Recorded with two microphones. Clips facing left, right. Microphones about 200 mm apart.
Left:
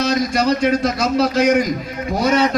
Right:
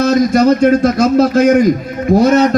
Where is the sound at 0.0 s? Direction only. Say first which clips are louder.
Right 8 dB; 50° right (ahead or behind).